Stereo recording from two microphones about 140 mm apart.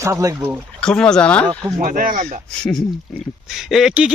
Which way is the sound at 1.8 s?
75° right (ahead or behind).